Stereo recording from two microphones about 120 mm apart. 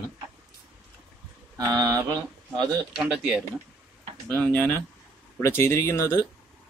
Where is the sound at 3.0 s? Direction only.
10° right (ahead or behind).